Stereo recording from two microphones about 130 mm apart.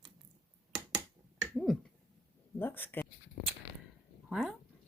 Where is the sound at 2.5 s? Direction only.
15° left (ahead or behind).